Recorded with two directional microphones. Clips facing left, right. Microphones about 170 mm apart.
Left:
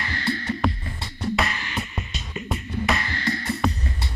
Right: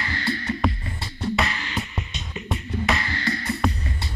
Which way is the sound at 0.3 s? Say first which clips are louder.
Left 1 dB; centre (ahead or behind).